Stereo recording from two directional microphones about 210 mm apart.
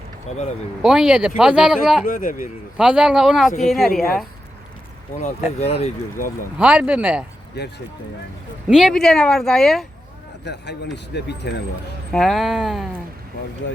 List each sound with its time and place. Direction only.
0.3 s speech: 30° left (ahead or behind)
0.8 s speech: centre (ahead or behind)
2.0 s speech: 40° left (ahead or behind)
2.7 s speech: 5° right (ahead or behind)
5.5 s speech: 30° left (ahead or behind)
6.6 s speech: 5° right (ahead or behind)
7.6 s speech: 50° left (ahead or behind)
8.6 s speech: centre (ahead or behind)
10.4 s speech: 55° left (ahead or behind)
12.1 s speech: centre (ahead or behind)